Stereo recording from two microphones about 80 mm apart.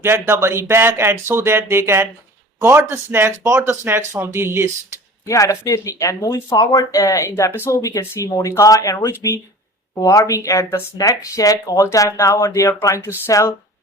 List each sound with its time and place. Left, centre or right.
0.0 s speech: right
5.2 s speech: left
7.5 s speech: left
7.8 s speech: left
13.0 s speech: left